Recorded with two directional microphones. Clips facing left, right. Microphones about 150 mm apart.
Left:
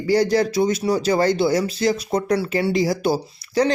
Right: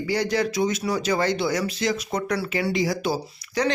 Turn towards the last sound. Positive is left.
turn(degrees=35)  # may be behind; listen again after turning